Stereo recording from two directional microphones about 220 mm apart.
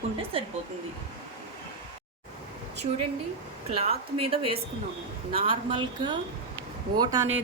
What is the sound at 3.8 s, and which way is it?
Speech, 25° right (ahead or behind).